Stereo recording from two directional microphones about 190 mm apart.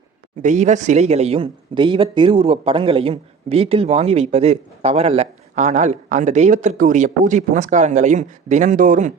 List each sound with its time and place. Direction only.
0.4 s speech: 40° right (ahead or behind)